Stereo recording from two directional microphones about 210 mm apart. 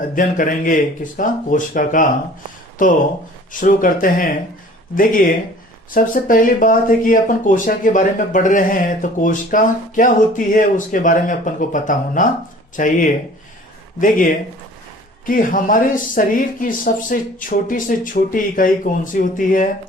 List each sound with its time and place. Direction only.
0.2 s speech: 40° left (ahead or behind)
5.9 s speech: 40° left (ahead or behind)